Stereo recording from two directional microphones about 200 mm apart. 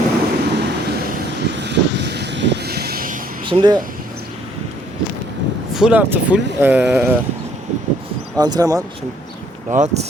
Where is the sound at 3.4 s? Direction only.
25° right (ahead or behind).